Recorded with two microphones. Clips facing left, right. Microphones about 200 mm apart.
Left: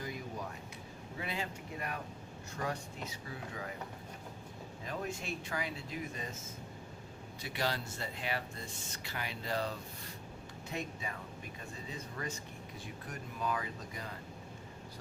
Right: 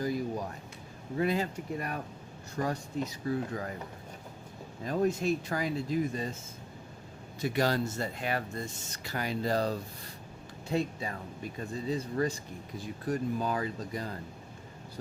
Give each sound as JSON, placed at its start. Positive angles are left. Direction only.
{"t": 0.0, "sound": "a sound", "side_deg": -35}
{"t": 1.2, "sound": "speech", "side_deg": -40}
{"t": 4.9, "sound": "speech", "side_deg": -40}
{"t": 7.4, "sound": "speech", "side_deg": -45}